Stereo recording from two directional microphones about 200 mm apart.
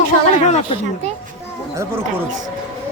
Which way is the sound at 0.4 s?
35° left (ahead or behind).